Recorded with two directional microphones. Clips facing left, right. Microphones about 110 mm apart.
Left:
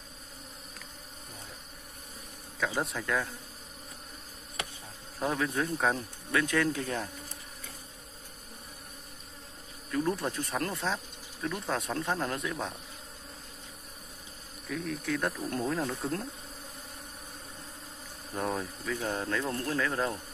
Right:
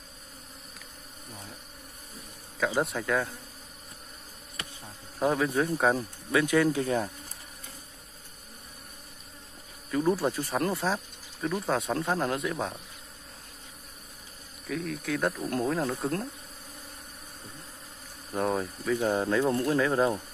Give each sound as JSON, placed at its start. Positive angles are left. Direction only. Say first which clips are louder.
{"t": 2.8, "sound": "insect", "louder": "right 4 dB", "side_deg": 0}
{"t": 5.2, "sound": "speech", "louder": "right 5 dB", "side_deg": -5}
{"t": 9.8, "sound": "insect", "louder": "right 4 dB", "side_deg": -5}
{"t": 14.7, "sound": "insect", "louder": "right 2 dB", "side_deg": 0}
{"t": 18.3, "sound": "speech", "louder": "right 4 dB", "side_deg": 0}